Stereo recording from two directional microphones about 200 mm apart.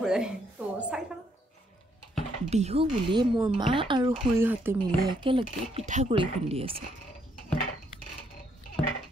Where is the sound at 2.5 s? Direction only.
30° right (ahead or behind).